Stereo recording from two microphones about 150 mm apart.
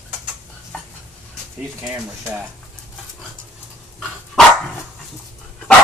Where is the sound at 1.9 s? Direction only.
10° right (ahead or behind).